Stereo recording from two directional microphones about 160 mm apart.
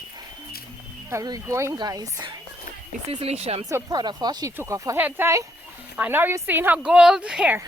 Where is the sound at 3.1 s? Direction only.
40° right (ahead or behind).